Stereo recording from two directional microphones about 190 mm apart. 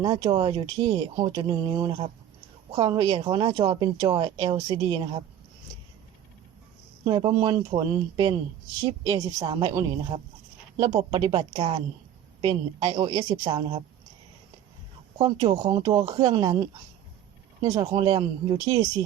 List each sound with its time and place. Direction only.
0.0 s speech: 20° right (ahead or behind)
7.0 s speech: 25° right (ahead or behind)
15.2 s speech: 20° right (ahead or behind)